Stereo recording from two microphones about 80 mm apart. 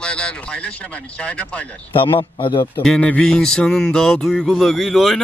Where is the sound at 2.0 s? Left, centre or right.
Left.